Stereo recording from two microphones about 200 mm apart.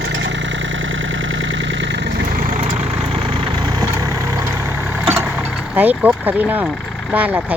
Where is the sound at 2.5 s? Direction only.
40° right (ahead or behind).